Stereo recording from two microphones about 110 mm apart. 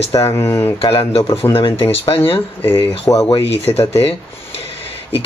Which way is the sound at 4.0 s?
60° left (ahead or behind).